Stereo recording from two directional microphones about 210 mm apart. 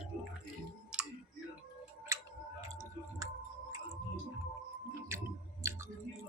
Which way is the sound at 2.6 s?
15° right (ahead or behind).